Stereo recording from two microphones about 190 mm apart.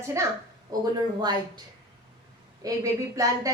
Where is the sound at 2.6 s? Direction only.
20° right (ahead or behind).